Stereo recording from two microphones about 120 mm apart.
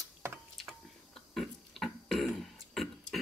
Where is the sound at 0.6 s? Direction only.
Centre (ahead or behind).